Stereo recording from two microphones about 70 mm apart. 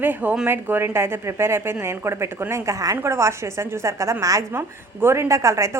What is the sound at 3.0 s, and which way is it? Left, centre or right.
A woman's voice, right.